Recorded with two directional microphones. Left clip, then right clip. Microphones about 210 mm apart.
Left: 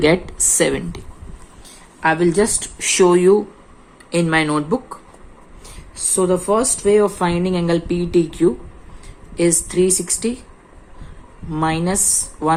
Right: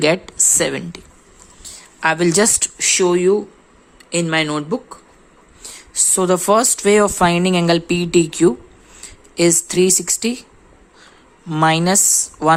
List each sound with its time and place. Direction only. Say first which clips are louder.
0.0 s a woman's voice: even; 20° right (ahead or behind)
1.6 s a sound: even; 25° right (ahead or behind)
2.7 s a woman's voice: left 3 dB; 15° right (ahead or behind)
5.9 s a woman's voice: right 2 dB; 40° right (ahead or behind)
11.4 s a woman's voice: right 5 dB; 30° right (ahead or behind)